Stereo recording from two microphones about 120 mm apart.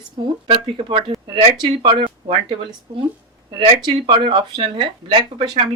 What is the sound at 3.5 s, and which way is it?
Speech, 40° right (ahead or behind).